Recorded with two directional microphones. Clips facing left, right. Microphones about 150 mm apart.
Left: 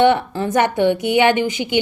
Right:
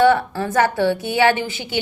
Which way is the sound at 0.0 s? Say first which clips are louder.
Left 1 dB; 20° left (ahead or behind).